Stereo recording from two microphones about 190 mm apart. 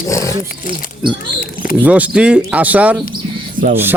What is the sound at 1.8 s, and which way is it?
Speech, 5° right (ahead or behind).